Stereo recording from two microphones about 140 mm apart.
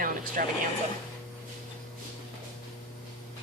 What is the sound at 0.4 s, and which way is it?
Speech, 80° right.